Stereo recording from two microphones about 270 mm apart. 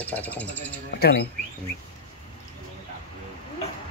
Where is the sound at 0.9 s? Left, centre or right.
Left.